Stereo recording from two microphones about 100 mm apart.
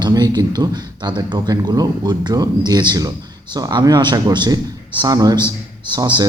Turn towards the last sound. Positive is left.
turn(degrees=-45)  # may be behind; listen again after turning